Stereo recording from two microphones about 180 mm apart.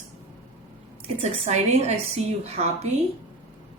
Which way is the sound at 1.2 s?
35° right (ahead or behind).